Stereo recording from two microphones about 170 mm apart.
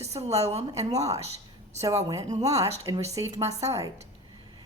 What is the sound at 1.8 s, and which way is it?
A woman's voice, 20° right (ahead or behind).